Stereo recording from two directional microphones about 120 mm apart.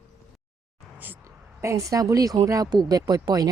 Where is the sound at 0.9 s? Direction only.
15° right (ahead or behind).